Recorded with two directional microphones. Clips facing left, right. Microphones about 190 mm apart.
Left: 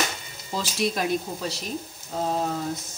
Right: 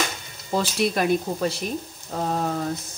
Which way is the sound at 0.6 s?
55° right (ahead or behind).